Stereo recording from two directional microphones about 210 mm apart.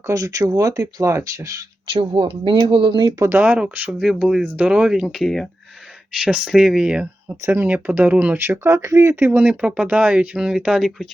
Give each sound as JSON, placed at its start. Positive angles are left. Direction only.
{"t": 0.1, "sound": "speech", "side_deg": -15}
{"t": 1.9, "sound": "speech", "side_deg": -25}
{"t": 3.2, "sound": "speech", "side_deg": -10}